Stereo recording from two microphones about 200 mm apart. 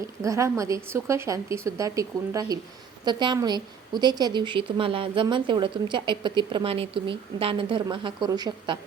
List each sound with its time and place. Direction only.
0.2 s a woman's voice: 15° right (ahead or behind)